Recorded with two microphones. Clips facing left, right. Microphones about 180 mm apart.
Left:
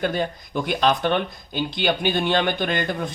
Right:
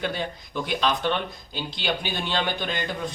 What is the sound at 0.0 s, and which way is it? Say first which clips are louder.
Speech: left 5 dB; 50° left (ahead or behind).